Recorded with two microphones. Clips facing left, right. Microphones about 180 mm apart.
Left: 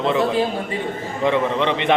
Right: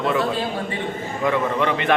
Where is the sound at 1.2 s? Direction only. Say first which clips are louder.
Left 2 dB; 20° left (ahead or behind).